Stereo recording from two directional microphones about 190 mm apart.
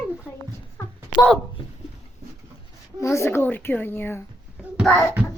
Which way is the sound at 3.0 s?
15° left (ahead or behind).